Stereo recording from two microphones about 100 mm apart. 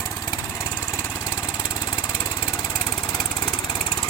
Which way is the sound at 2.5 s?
25° left (ahead or behind).